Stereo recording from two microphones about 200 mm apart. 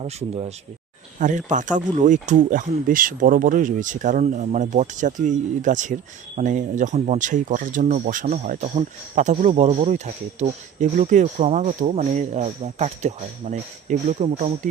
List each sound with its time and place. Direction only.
0.0 s speech: 30° right (ahead or behind)